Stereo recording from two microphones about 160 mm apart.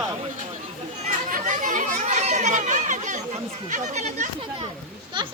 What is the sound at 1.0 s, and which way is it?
Children playing, 55° right (ahead or behind).